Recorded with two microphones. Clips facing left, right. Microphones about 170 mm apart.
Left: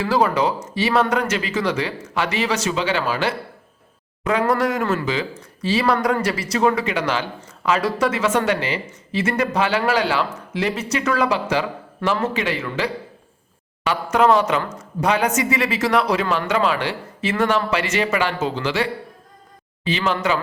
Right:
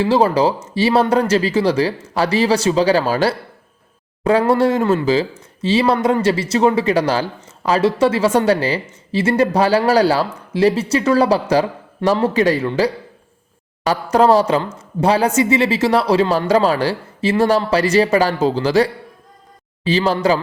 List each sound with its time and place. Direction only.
0.0 s speech: 30° right (ahead or behind)